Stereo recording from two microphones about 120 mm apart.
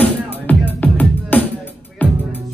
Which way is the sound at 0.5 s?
15° left (ahead or behind).